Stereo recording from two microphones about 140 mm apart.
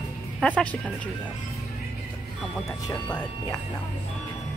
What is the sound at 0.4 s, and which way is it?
Speech, 10° left (ahead or behind).